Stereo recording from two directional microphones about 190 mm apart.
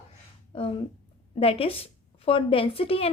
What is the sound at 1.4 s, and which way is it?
A woman's voice, 30° left (ahead or behind).